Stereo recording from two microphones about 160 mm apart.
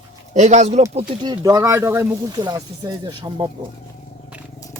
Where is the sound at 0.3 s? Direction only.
50° right (ahead or behind).